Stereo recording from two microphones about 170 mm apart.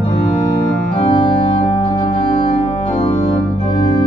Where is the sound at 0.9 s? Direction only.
30° left (ahead or behind).